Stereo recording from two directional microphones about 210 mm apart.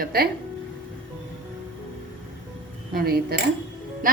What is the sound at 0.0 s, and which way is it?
Speech, 45° right (ahead or behind).